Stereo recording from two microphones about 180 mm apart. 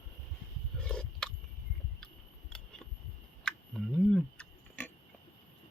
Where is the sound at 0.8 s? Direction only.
5° left (ahead or behind).